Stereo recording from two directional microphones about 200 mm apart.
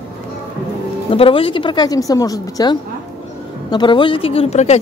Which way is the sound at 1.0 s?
25° left (ahead or behind).